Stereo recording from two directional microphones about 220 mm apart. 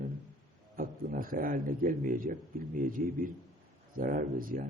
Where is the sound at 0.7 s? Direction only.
40° right (ahead or behind).